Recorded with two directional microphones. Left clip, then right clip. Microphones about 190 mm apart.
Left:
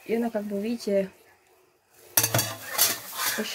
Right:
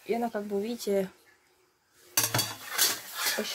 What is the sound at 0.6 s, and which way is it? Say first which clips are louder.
Speech: left 5 dB; 60° right (ahead or behind).